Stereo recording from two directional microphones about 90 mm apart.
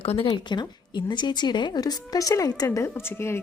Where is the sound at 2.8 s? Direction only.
30° left (ahead or behind).